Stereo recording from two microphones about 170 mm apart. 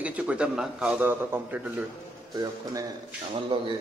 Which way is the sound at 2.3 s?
20° right (ahead or behind).